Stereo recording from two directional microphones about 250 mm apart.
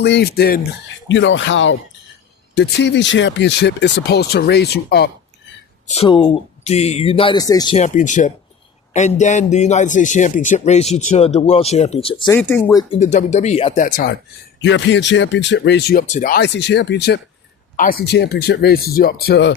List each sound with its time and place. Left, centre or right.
0.0 s speech: left
5.9 s a man's voice: left
12.3 s speech: centre
12.9 s a man's voice: left
14.6 s speech: left